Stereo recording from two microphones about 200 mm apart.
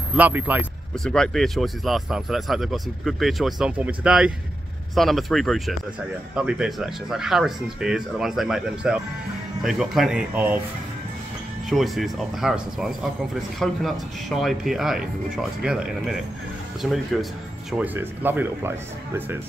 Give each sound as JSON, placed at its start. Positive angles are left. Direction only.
{"t": 0.1, "sound": "speech", "side_deg": -10}
{"t": 1.0, "sound": "speech", "side_deg": 0}
{"t": 11.7, "sound": "speech", "side_deg": 0}